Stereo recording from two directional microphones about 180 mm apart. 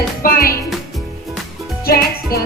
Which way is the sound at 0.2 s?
55° left (ahead or behind).